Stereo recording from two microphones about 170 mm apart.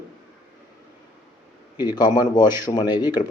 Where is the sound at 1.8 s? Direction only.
25° left (ahead or behind).